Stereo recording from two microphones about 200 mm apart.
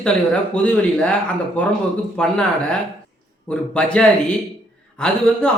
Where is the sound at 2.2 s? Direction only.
5° left (ahead or behind).